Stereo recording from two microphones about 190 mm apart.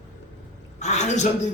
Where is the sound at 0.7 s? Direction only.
40° left (ahead or behind).